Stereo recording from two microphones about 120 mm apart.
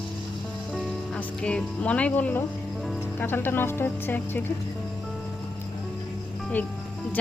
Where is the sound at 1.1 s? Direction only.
10° left (ahead or behind).